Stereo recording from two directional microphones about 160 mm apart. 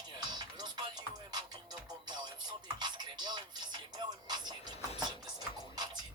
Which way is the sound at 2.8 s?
25° right (ahead or behind).